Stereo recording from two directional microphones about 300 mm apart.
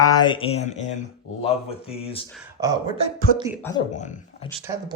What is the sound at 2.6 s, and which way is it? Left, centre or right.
Speech, centre.